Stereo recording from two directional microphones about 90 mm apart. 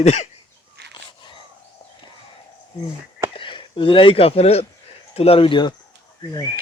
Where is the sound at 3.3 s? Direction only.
70° left (ahead or behind).